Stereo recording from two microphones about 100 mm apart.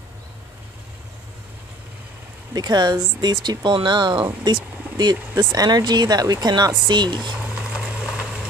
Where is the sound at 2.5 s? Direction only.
40° right (ahead or behind).